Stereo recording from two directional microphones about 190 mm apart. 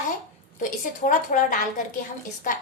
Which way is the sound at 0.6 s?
45° left (ahead or behind).